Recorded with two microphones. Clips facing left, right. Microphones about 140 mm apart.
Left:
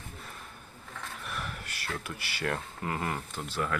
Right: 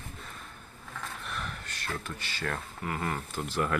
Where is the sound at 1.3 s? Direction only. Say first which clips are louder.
Left 2 dB; 5° left (ahead or behind).